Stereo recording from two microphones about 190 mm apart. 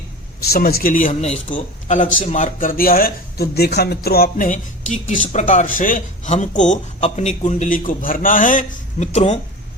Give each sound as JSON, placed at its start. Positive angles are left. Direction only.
{"t": 0.3, "sound": "speech", "side_deg": 55}